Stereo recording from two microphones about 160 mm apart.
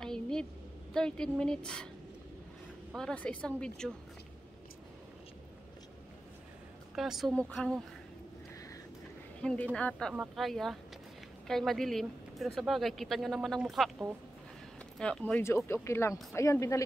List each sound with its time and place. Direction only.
0.0 s a sound: 5° left (ahead or behind)
0.9 s speech: 5° left (ahead or behind)
3.0 s speech: 5° left (ahead or behind)
7.0 s speech: centre (ahead or behind)
9.4 s a woman's voice: 5° left (ahead or behind)